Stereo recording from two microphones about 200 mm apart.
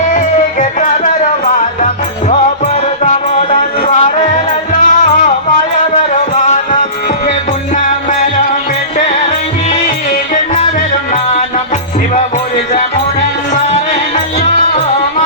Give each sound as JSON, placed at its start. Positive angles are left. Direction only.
{"t": 0.6, "sound": "music", "side_deg": 40}
{"t": 3.0, "sound": "music", "side_deg": 35}